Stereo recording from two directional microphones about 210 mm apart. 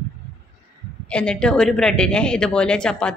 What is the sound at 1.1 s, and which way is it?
Speech, 5° left (ahead or behind).